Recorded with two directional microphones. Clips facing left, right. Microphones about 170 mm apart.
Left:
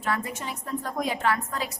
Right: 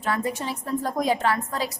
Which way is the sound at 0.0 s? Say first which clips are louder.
Right 3 dB; 35° right (ahead or behind).